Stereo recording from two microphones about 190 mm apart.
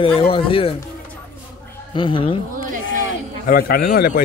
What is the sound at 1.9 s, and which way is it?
Speech, 25° left (ahead or behind).